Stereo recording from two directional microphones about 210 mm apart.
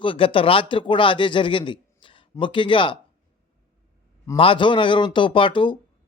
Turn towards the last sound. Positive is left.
turn(degrees=25)  # may be behind; listen again after turning